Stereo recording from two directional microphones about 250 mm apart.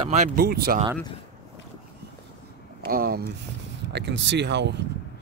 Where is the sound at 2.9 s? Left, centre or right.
Right.